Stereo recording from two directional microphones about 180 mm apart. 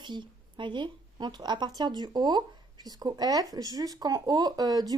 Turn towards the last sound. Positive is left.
turn(degrees=-20)  # may be behind; listen again after turning